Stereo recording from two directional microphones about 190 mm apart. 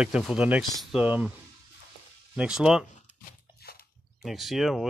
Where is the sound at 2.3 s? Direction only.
5° right (ahead or behind).